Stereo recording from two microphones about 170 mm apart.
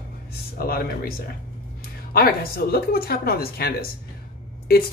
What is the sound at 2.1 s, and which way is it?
Speech, 65° left (ahead or behind).